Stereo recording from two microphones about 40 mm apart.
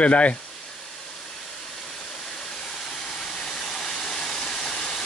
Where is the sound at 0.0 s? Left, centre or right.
Left.